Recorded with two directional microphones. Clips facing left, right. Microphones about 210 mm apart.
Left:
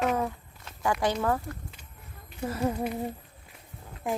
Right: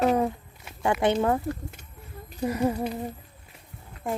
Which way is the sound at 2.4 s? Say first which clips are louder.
Right 4 dB; 15° right (ahead or behind).